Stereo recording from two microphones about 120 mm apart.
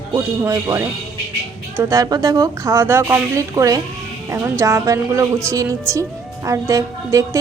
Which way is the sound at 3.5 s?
30° right (ahead or behind).